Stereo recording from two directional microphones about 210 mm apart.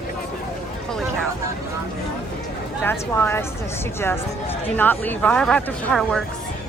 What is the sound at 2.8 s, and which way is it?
Speech, 10° left (ahead or behind).